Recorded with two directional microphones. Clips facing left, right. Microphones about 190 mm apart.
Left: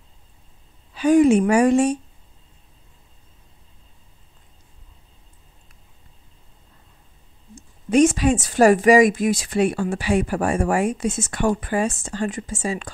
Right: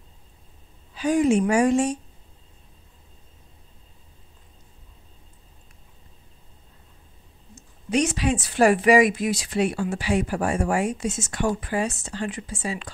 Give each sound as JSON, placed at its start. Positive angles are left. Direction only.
{"t": 0.9, "sound": "a woman's voice", "side_deg": 65}
{"t": 7.5, "sound": "a woman's voice", "side_deg": 50}